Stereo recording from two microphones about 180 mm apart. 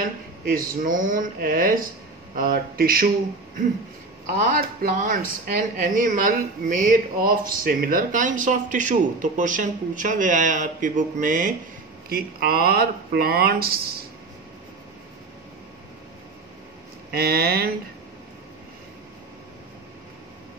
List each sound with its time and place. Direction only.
0.5 s speech: 50° right (ahead or behind)
4.3 s speech: 45° right (ahead or behind)
17.1 s speech: 60° right (ahead or behind)